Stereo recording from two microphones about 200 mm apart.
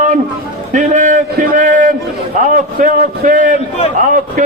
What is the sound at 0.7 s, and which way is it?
A man's voice, 40° right (ahead or behind).